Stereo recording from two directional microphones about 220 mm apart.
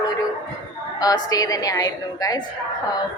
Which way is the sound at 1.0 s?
15° left (ahead or behind).